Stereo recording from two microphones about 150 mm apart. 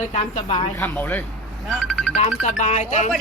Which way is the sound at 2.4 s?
55° left (ahead or behind).